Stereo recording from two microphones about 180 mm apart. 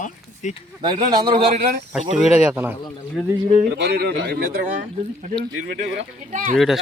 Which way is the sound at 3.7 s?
65° right (ahead or behind).